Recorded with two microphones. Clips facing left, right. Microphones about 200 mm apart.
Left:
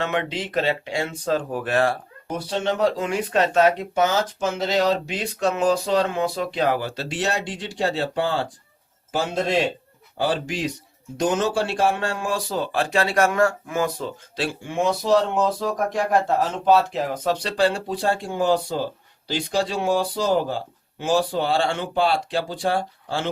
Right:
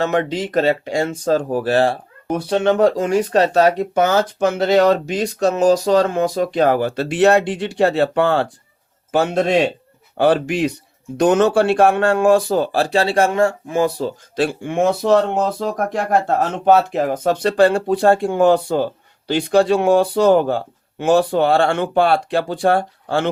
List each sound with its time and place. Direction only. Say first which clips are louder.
0.0 s speech: right 6 dB; 40° right (ahead or behind)
2.2 s speech: right 8 dB; 60° right (ahead or behind); by 3.8 s 40° right (ahead or behind)
3.9 s speech: right 5 dB; 55° right (ahead or behind)
12.7 s speech: right 1 dB; 35° right (ahead or behind)
14.3 s speech: right 7 dB; 55° right (ahead or behind)